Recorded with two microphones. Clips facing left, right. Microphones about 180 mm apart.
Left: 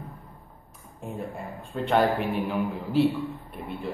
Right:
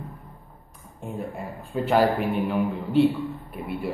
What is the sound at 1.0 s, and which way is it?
A man's voice, centre (ahead or behind).